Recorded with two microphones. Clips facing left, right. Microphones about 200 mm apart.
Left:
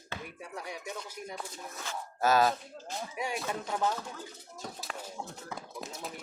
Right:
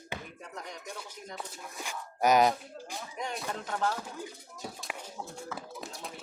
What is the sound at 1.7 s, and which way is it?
Speech, 15° right (ahead or behind).